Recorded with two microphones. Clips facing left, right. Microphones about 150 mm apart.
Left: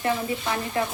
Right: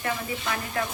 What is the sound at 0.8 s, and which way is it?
Speech, 25° left (ahead or behind).